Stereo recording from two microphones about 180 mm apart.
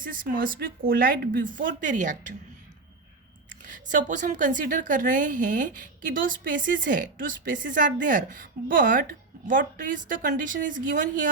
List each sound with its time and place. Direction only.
0.0 s a woman's voice: 50° right (ahead or behind)
3.7 s a woman's voice: 45° right (ahead or behind)